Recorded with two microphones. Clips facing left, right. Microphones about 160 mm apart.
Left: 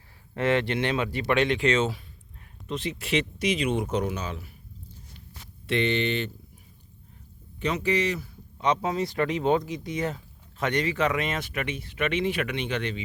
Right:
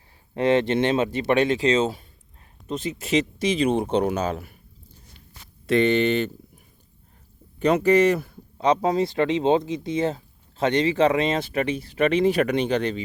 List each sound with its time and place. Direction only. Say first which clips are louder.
0.3 s speech: right 5 dB; 20° right (ahead or behind)
1.5 s speech: right 3 dB; 35° right (ahead or behind)
2.6 s a sound: right 3 dB; centre (ahead or behind)
3.0 s speech: right 5 dB; 40° right (ahead or behind)
4.0 s speech: right 7 dB; 45° right (ahead or behind)
5.6 s speech: right 6 dB; 40° right (ahead or behind)
7.6 s speech: right 8 dB; 50° right (ahead or behind)
8.5 s speech: right 5 dB; 35° right (ahead or behind)